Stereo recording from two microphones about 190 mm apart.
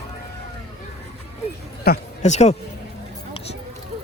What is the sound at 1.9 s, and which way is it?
Speech, 55° left (ahead or behind).